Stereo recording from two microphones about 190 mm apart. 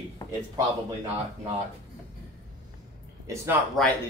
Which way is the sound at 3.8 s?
Centre (ahead or behind).